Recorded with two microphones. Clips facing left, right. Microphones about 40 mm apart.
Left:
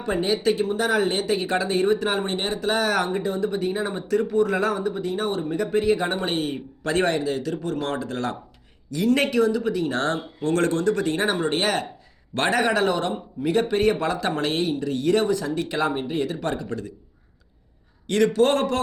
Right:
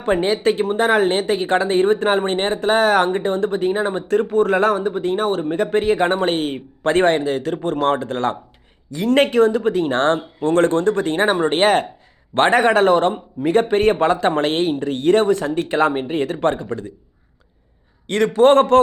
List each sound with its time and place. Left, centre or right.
0.0 s a man's voice: right
18.3 s a man's voice: right